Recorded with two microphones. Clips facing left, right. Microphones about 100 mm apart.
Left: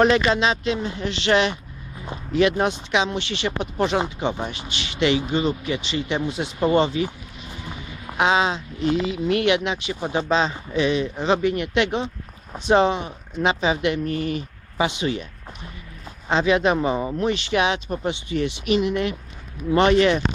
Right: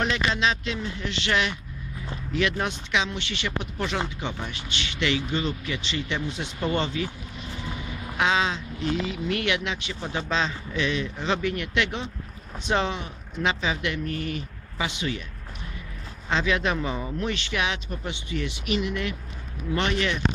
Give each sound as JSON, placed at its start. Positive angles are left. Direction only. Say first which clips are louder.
{"t": 0.3, "sound": "speech", "louder": "left 5 dB", "side_deg": 25}
{"t": 6.7, "sound": "speech", "louder": "left 7 dB", "side_deg": 30}
{"t": 8.2, "sound": "speech", "louder": "left 4 dB", "side_deg": 25}
{"t": 16.3, "sound": "speech", "louder": "left 6 dB", "side_deg": 25}
{"t": 19.9, "sound": "speech", "louder": "left 12 dB", "side_deg": 35}